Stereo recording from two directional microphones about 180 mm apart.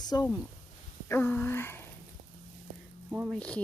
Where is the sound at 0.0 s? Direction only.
20° left (ahead or behind).